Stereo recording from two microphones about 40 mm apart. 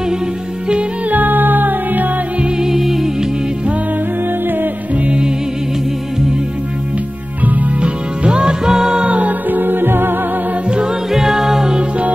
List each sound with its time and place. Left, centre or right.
1.1 s music: right
2.6 s music: centre
4.9 s music: right
7.4 s music: right
7.8 s music: right
9.0 s music: right
9.5 s music: right
11.1 s music: centre